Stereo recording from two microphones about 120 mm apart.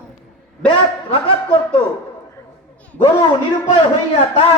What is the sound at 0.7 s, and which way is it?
Speech, 45° left (ahead or behind).